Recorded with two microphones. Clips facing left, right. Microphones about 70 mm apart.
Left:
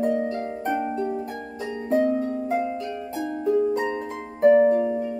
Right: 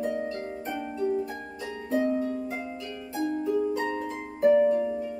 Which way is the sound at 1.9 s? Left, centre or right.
Left.